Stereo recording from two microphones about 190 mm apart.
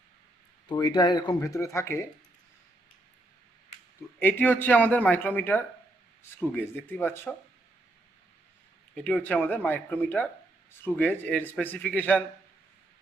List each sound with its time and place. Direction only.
0.7 s speech: 20° left (ahead or behind)
4.2 s a man's voice: 10° left (ahead or behind)
9.0 s a man's voice: 5° left (ahead or behind)